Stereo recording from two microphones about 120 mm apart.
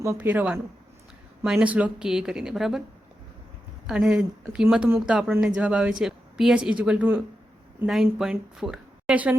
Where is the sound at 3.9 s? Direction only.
5° right (ahead or behind).